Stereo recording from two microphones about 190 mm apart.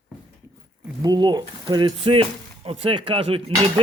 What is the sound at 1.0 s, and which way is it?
Speech, 20° right (ahead or behind).